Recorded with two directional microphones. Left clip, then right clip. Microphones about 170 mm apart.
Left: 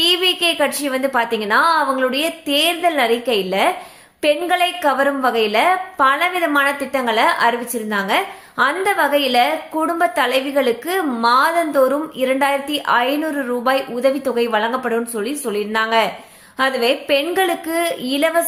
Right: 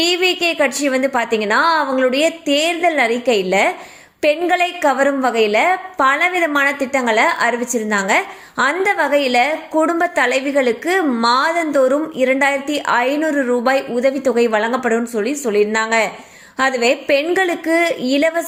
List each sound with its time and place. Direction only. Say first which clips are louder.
0.0 s a woman's voice: even; 20° right (ahead or behind)